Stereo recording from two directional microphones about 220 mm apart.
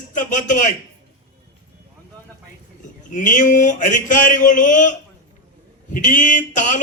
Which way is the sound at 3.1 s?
35° left (ahead or behind).